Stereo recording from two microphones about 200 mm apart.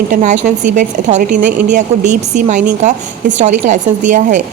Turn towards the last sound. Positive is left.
turn(degrees=-40)  # may be behind; listen again after turning